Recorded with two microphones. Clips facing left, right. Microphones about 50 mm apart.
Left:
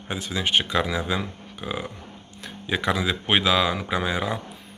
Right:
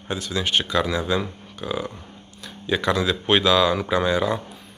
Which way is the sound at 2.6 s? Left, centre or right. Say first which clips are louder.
Right 3 dB; left.